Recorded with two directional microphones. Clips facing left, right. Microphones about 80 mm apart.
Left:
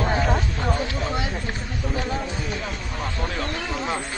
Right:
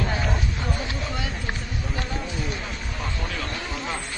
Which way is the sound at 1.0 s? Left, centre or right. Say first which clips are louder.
Left 4 dB; left.